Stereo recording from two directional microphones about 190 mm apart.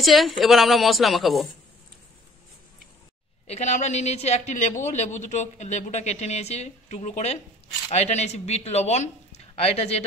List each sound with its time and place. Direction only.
0.0 s a woman's voice: centre (ahead or behind)
3.4 s a man's voice: 35° left (ahead or behind)